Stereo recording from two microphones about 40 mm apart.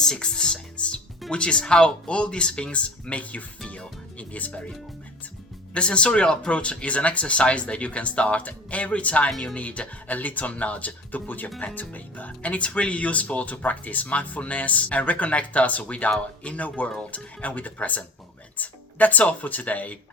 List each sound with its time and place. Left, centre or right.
0.0 s music: centre
1.3 s speech: left
3.7 s music: left
5.7 s speech: left
18.5 s music: left
19.2 s speech: left